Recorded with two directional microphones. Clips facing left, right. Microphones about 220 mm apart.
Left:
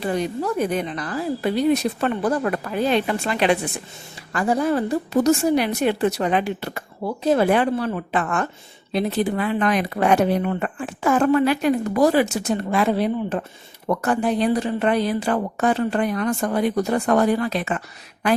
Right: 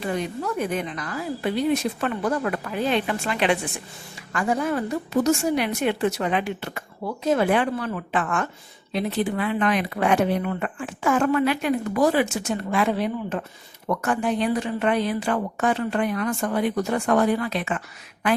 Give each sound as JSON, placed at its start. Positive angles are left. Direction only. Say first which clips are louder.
{"t": 0.0, "sound": "speech", "louder": "left 4 dB", "side_deg": 35}